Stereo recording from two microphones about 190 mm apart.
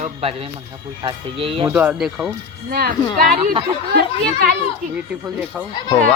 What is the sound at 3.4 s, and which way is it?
Speech, 30° right (ahead or behind).